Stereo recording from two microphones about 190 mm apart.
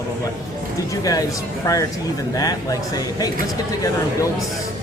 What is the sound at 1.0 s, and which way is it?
Speech, 20° left (ahead or behind).